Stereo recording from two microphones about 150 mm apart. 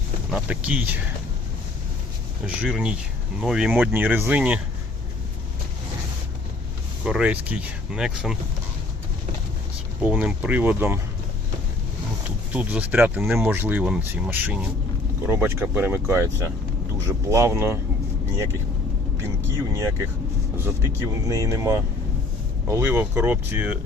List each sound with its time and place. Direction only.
0.3 s speech: 5° right (ahead or behind)
2.6 s speech: 5° right (ahead or behind)
7.0 s speech: 5° right (ahead or behind)
10.0 s speech: 5° right (ahead or behind)
12.5 s speech: 10° right (ahead or behind)
19.7 s speech: 20° right (ahead or behind)